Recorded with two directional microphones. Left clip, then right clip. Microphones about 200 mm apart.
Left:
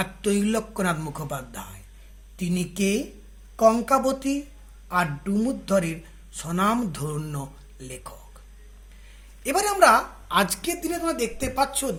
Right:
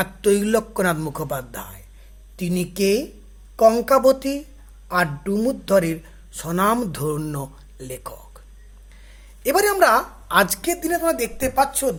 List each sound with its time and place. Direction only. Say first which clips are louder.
0.0 s speech: right 6 dB; 50° right (ahead or behind)
9.4 s speech: right 2 dB; 45° right (ahead or behind)